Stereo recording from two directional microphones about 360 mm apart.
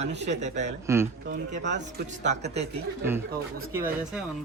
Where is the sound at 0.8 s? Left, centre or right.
Centre.